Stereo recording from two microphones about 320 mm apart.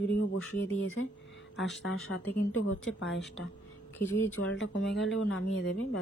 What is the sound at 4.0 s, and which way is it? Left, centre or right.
Speech, centre.